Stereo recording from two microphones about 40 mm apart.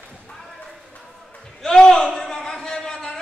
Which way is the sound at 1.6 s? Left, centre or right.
Centre.